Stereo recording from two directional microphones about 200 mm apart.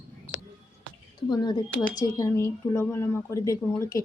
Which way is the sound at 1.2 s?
20° left (ahead or behind).